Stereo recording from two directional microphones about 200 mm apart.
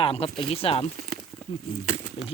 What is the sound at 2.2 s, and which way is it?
Speech, 30° left (ahead or behind).